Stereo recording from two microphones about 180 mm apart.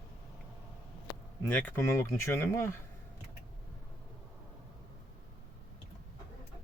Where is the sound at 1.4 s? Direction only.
10° left (ahead or behind).